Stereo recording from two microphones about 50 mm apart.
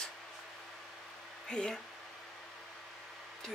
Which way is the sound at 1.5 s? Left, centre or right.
Centre.